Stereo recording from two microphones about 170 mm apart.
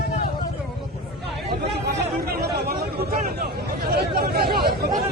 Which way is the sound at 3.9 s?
65° right (ahead or behind).